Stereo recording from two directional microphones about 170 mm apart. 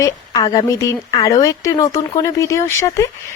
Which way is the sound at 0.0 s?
20° left (ahead or behind).